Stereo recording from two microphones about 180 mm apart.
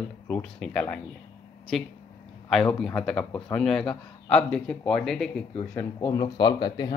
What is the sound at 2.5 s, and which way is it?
A man's voice, centre (ahead or behind).